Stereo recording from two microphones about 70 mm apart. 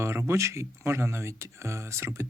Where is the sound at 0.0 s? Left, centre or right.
Right.